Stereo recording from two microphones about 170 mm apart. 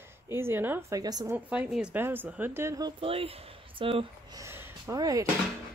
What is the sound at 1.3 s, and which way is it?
Speech, 10° right (ahead or behind).